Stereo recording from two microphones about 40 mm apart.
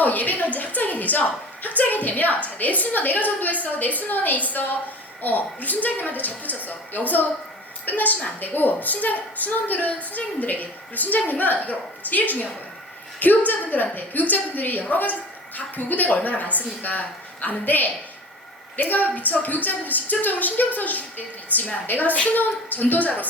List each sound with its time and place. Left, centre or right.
0.0 s a woman's voice: left